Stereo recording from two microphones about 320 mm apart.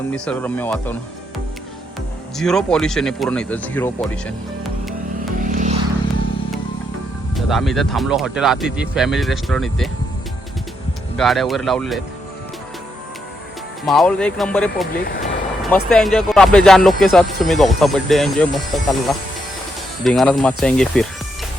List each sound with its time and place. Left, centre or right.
0.1 s speech: centre
2.4 s speech: centre
4.6 s music: centre
5.4 s vehicle: right
7.3 s speech: centre
11.2 s speech: centre
13.8 s speech: centre
14.8 s speech: left
15.7 s speech: centre